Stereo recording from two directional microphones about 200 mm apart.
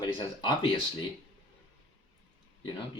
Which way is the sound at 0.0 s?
25° left (ahead or behind).